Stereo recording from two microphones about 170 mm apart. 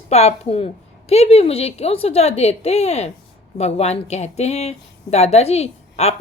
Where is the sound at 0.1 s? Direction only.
40° left (ahead or behind).